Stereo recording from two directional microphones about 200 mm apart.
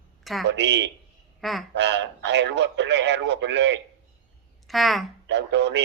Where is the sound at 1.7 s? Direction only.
60° right (ahead or behind).